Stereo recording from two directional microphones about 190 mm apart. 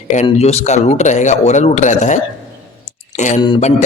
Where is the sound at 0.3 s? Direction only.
35° left (ahead or behind).